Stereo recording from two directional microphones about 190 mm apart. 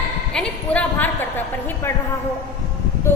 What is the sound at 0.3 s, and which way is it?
A woman's voice, 5° left (ahead or behind).